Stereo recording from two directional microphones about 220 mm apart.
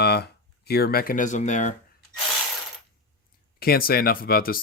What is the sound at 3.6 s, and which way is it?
Speech, 40° left (ahead or behind).